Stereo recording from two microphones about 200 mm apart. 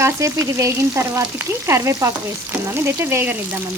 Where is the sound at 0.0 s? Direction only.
15° right (ahead or behind).